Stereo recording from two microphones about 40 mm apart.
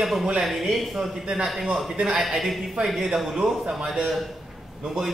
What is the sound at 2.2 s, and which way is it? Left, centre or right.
Speech, centre.